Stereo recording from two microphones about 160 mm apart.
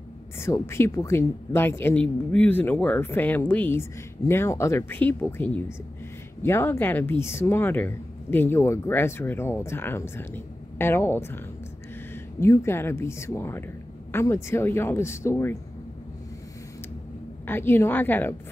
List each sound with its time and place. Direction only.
0.4 s speech: 15° left (ahead or behind)
17.5 s speech: 15° left (ahead or behind)